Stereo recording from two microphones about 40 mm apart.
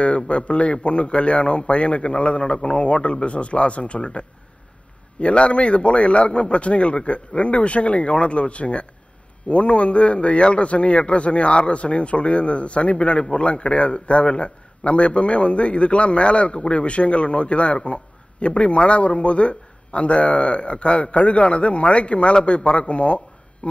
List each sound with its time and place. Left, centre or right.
0.0 s a man's voice: left